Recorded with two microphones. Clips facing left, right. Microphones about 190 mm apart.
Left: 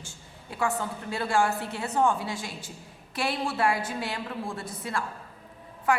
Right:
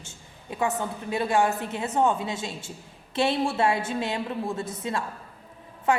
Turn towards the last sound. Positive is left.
turn(degrees=-25)  # may be behind; listen again after turning